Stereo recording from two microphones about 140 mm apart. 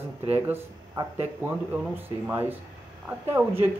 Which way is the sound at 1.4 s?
15° right (ahead or behind).